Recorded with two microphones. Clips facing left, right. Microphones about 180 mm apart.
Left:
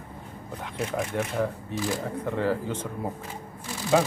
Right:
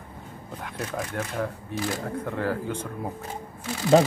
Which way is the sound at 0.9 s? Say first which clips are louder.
Left 3 dB; 10° left (ahead or behind).